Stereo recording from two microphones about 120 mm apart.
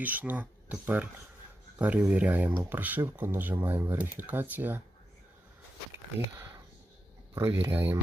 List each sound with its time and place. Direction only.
0.0 s speech: 15° right (ahead or behind)
7.3 s speech: 20° right (ahead or behind)